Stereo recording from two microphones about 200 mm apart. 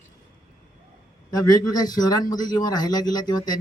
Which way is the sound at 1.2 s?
20° left (ahead or behind).